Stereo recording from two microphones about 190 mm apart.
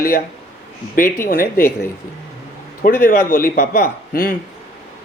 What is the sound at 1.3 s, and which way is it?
Speech, 50° left (ahead or behind).